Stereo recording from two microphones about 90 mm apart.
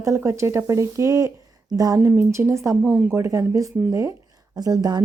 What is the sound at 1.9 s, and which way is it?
Speech, 25° right (ahead or behind).